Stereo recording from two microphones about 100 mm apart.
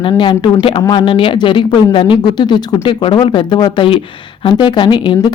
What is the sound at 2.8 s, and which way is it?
A woman's voice, 60° left (ahead or behind).